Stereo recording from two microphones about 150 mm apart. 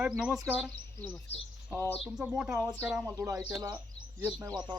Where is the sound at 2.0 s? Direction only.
10° right (ahead or behind).